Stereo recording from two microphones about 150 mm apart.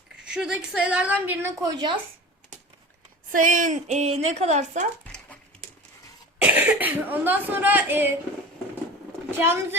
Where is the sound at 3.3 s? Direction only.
60° right (ahead or behind).